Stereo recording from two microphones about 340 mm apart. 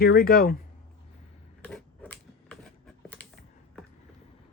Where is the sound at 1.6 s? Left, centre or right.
Centre.